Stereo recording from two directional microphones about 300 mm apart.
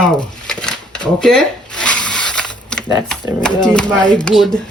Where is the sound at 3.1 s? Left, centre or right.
Centre.